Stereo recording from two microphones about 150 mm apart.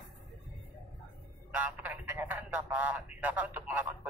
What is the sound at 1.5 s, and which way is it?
A man's voice, 10° right (ahead or behind).